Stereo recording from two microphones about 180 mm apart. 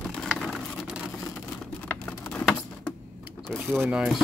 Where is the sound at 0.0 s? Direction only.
5° left (ahead or behind).